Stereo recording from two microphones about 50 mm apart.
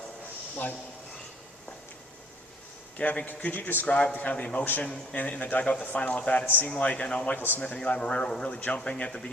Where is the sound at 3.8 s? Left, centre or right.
Left.